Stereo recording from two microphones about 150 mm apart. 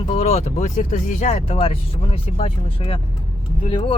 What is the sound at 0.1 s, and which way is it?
Speech, 45° left (ahead or behind).